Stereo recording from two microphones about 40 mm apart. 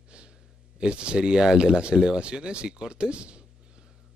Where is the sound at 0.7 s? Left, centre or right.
Right.